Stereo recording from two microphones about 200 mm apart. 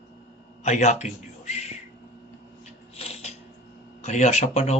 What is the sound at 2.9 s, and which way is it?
Shuffling cards, 30° left (ahead or behind).